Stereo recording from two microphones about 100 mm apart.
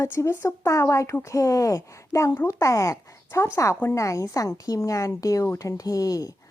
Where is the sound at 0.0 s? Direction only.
25° left (ahead or behind).